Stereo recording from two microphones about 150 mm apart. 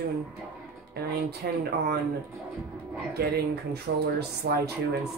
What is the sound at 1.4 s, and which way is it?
Speech, 90° right.